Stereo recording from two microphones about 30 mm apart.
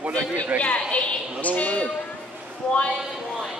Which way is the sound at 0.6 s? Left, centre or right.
Left.